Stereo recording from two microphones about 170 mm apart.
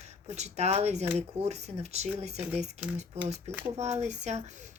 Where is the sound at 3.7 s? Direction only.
40° right (ahead or behind).